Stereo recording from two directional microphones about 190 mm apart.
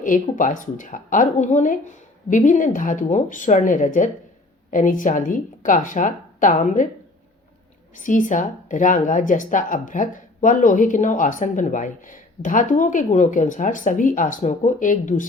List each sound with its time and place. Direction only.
0.0 s speech: 45° left (ahead or behind)
7.9 s speech: 40° left (ahead or behind)